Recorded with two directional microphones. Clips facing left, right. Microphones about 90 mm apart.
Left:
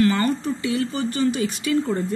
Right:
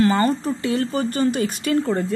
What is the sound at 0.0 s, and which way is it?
A woman's voice, 30° right (ahead or behind).